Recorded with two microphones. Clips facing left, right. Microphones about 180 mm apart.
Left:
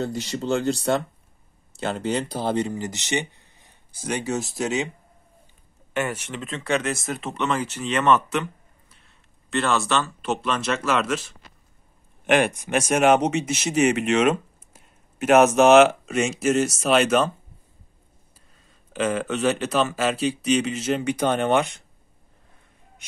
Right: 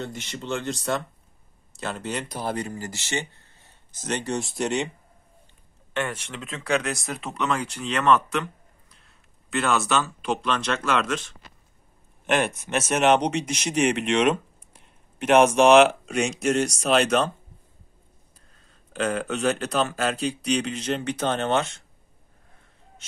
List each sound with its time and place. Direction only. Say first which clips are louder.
0.0 s speech: left 7 dB; 35° left (ahead or behind); by 4.8 s centre (ahead or behind)
5.9 s speech: left 3 dB; 5° left (ahead or behind)
12.5 s speech: left 3 dB; 15° left (ahead or behind)
18.7 s speech: left 2 dB; 5° left (ahead or behind)